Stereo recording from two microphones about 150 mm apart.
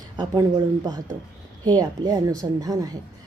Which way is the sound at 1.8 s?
25° right (ahead or behind).